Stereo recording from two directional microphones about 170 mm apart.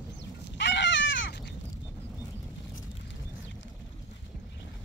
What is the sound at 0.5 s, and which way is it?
Goat, 90° left.